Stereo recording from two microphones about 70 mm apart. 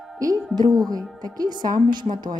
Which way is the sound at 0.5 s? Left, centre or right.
Right.